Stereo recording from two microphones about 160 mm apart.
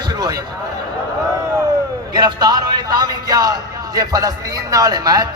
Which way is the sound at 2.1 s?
25° right (ahead or behind).